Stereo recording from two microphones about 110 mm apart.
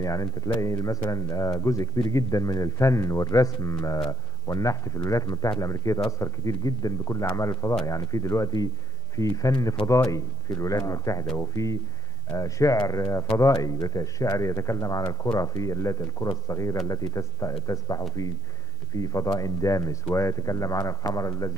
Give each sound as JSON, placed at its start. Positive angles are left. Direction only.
{"t": 0.0, "sound": "speech", "side_deg": 30}